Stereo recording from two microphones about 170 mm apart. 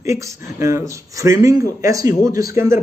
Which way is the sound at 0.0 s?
15° right (ahead or behind).